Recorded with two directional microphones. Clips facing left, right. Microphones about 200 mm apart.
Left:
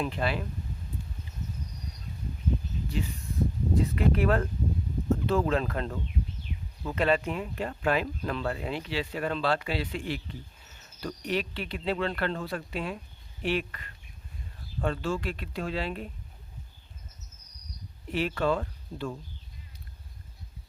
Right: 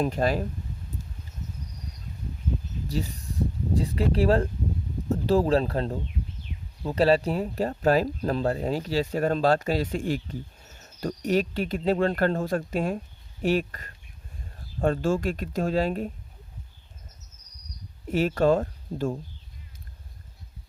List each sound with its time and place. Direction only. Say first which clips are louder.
0.0 s speech: right 5 dB; 40° right (ahead or behind)
2.9 s speech: right 4 dB; 40° right (ahead or behind)
18.1 s speech: right 6 dB; 45° right (ahead or behind)